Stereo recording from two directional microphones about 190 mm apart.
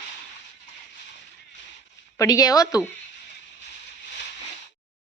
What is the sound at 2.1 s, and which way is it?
Speech, 20° left (ahead or behind).